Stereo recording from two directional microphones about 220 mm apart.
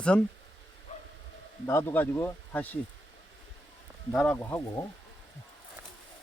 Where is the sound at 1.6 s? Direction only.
10° left (ahead or behind).